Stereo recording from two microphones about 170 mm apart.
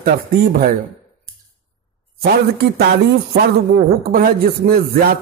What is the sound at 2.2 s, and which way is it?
Speech, 65° right (ahead or behind).